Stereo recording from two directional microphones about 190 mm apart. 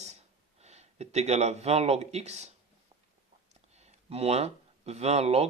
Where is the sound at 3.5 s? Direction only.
35° right (ahead or behind).